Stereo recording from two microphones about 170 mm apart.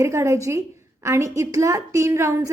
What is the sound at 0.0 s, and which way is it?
A woman's voice, 15° right (ahead or behind).